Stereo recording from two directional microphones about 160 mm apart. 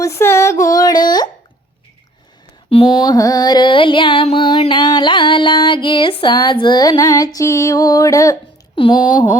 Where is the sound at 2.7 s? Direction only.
30° left (ahead or behind).